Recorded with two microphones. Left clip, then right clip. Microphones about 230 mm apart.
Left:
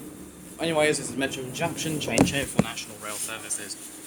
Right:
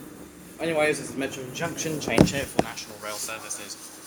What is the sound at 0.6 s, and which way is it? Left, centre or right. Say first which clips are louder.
Speech: left 1 dB; left.